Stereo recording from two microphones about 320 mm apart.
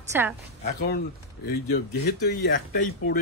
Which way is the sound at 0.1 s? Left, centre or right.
Centre.